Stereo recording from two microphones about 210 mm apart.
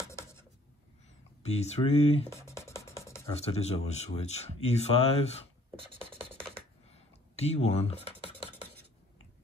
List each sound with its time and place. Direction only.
0.1 s writing: 15° left (ahead or behind)
1.5 s speech: 30° left (ahead or behind)
2.2 s music: 15° left (ahead or behind)
3.3 s speech: 30° left (ahead or behind)
6.9 s computer keyboard: 30° left (ahead or behind)